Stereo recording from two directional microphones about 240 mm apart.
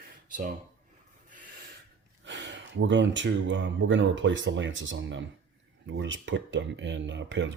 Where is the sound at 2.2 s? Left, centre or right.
Right.